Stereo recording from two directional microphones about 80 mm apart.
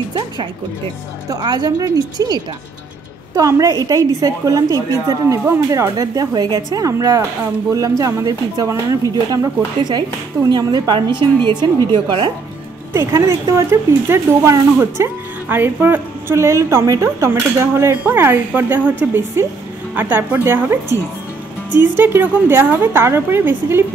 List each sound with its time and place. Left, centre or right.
1.3 s speech: right
6.9 s speech: right
12.9 s a woman's voice: right
15.4 s a woman's voice: right
17.3 s a woman's voice: right